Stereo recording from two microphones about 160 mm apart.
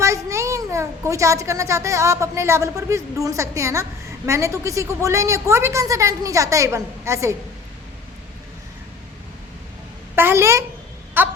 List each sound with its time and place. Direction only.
0.0 s a child's voice: 20° right (ahead or behind)
10.2 s a child's voice: 15° right (ahead or behind)
11.2 s baby cry: 10° right (ahead or behind)